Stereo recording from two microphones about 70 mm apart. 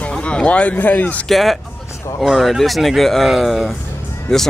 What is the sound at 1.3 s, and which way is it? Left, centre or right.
Speech, centre.